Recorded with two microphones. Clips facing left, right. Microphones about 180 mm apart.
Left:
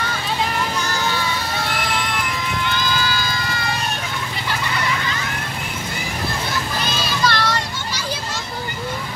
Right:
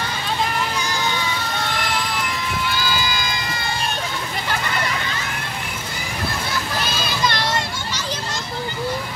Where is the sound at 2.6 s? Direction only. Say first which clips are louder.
Left 1 dB; 10° right (ahead or behind).